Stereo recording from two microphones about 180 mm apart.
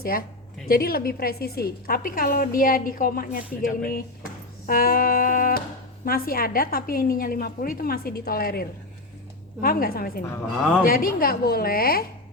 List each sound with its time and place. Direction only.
0.0 s a woman's voice: 55° left (ahead or behind)